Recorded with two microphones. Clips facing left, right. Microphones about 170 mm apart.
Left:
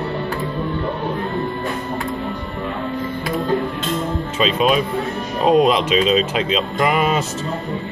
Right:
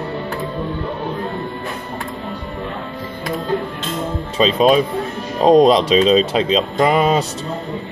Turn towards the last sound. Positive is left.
turn(degrees=-35)  # may be behind; listen again after turning